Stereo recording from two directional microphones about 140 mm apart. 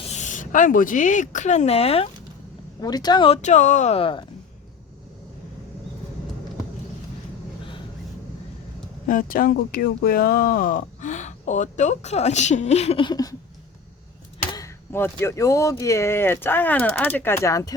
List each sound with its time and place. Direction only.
0.0 s speech: 55° left (ahead or behind)
2.8 s speech: 30° left (ahead or behind)
3.2 s speech: 50° left (ahead or behind)
3.9 s speech: 40° left (ahead or behind)
9.0 s speech: 80° left; by 13.0 s 50° left (ahead or behind)
13.0 s speech: 30° left (ahead or behind)
14.5 s speech: 20° left (ahead or behind)